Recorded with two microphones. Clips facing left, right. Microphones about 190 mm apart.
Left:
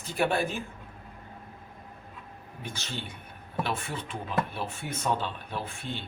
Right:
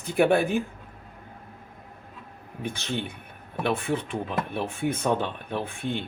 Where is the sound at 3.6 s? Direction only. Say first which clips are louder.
Right 6 dB; 60° right (ahead or behind).